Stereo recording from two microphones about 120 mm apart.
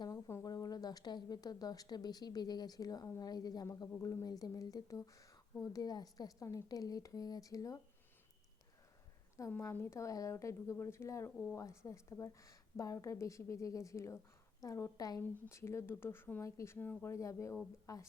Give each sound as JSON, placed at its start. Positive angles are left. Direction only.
{"t": 0.0, "sound": "speech", "side_deg": 25}
{"t": 9.5, "sound": "a woman's voice", "side_deg": 20}